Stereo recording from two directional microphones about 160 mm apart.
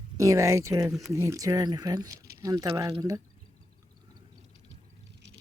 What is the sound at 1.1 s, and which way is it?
Speech, 20° right (ahead or behind).